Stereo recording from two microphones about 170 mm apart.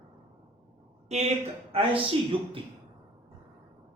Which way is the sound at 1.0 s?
40° right (ahead or behind).